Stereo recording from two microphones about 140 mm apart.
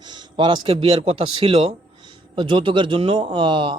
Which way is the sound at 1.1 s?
45° right (ahead or behind).